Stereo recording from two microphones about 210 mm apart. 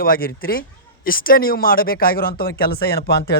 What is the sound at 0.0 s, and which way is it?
Speech, 45° left (ahead or behind).